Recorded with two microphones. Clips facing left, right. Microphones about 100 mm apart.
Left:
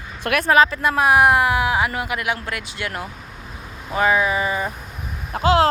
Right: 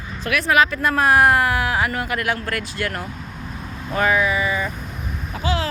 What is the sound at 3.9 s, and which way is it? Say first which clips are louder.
Vehicle: left 1 dB; 20° left (ahead or behind).